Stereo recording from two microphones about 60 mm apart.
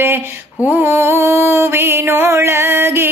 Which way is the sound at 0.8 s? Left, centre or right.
Right.